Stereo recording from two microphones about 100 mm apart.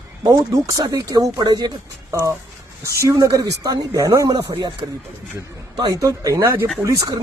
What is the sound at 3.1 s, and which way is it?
Speech, 40° right (ahead or behind).